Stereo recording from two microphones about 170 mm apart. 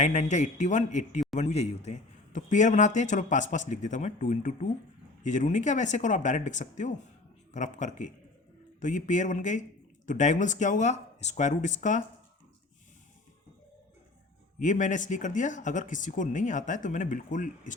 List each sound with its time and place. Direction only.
0.0 s a man's voice: 45° left (ahead or behind)
14.6 s a man's voice: 45° left (ahead or behind)